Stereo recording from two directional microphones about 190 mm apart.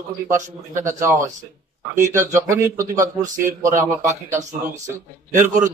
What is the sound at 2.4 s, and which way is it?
Speech, 15° right (ahead or behind).